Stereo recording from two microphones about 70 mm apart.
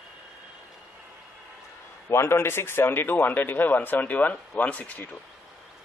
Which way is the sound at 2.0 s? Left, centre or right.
Left.